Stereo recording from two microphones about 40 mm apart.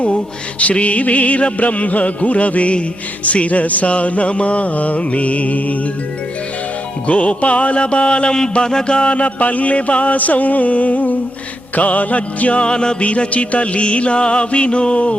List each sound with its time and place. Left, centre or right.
0.6 s mantra: left
7.1 s mantra: left
12.6 s music: left
13.0 s music: left